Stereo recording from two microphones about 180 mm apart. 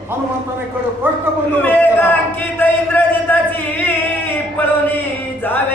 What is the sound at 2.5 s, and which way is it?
Speech, 10° left (ahead or behind).